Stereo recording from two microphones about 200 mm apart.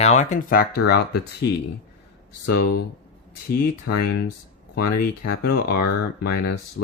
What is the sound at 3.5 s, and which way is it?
Speech, 55° left (ahead or behind).